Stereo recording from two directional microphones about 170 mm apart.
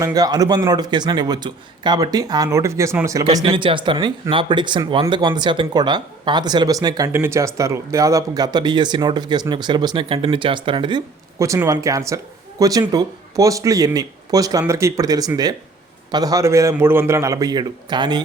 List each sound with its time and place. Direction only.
0.0 s speech: 20° right (ahead or behind)
3.3 s speech: 30° right (ahead or behind)
11.3 s speech: 15° right (ahead or behind)